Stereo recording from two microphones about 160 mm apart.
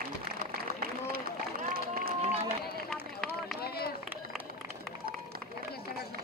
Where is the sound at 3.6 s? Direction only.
75° left (ahead or behind).